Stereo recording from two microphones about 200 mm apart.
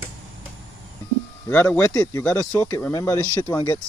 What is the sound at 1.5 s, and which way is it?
Speech, 10° left (ahead or behind).